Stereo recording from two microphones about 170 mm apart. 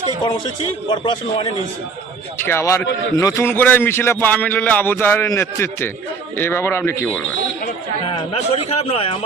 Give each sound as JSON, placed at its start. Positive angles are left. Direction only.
{"t": 0.9, "sound": "a man's voice", "side_deg": 25}
{"t": 2.4, "sound": "speech", "side_deg": 15}
{"t": 8.0, "sound": "a man's voice", "side_deg": 35}